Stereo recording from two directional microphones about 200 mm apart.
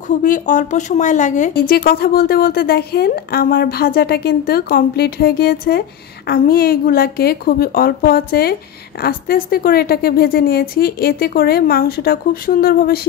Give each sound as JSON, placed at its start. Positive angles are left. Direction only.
{"t": 0.1, "sound": "speech", "side_deg": 40}